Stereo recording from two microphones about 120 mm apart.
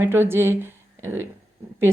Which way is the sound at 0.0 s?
20° right (ahead or behind).